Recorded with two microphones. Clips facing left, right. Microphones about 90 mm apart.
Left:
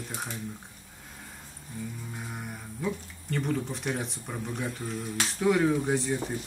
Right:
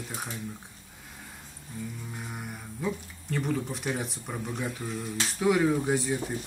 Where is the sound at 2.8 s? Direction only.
Centre (ahead or behind).